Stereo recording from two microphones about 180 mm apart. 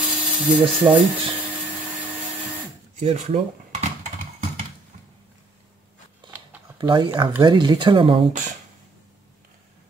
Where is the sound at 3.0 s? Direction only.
35° right (ahead or behind).